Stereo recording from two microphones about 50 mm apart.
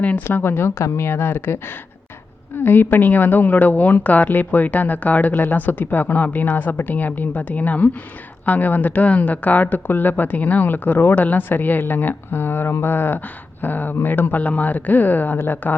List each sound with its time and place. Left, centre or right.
0.3 s a woman's voice: left